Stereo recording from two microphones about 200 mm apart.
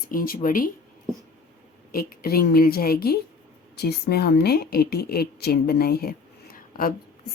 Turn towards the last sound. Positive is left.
turn(degrees=45)  # may be behind; listen again after turning